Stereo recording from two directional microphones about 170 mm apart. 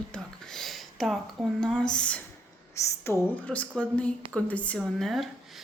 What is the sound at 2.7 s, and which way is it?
Speech, 15° left (ahead or behind).